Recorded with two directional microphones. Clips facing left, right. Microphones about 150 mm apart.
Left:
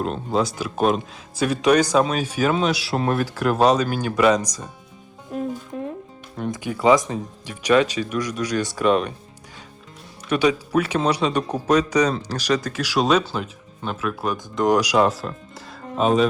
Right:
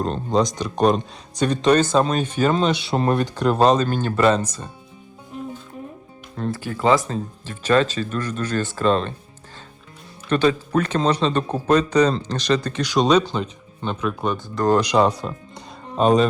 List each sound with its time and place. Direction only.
0.0 s speech: 5° left (ahead or behind)
5.7 s music: 80° left
6.3 s speech: 15° left (ahead or behind)
10.2 s speech: 10° left (ahead or behind)
14.4 s speech: 15° left (ahead or behind)